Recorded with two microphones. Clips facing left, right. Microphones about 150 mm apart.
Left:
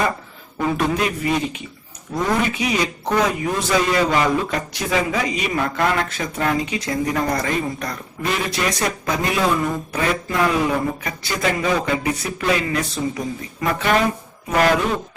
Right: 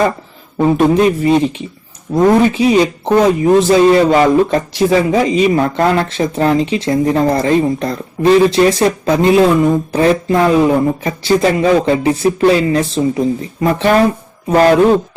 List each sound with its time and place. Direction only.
0.6 s speech: 30° right (ahead or behind)